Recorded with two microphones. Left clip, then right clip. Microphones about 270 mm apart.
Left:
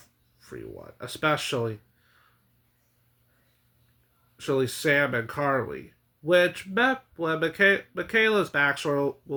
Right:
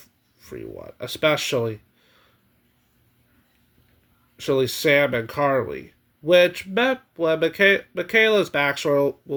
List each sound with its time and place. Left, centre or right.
0.3 s speech: centre
4.4 s speech: centre